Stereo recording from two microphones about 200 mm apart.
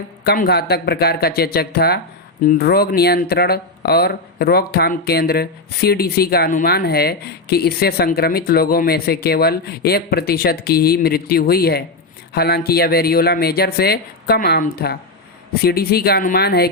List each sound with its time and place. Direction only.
0.3 s speech: 50° left (ahead or behind)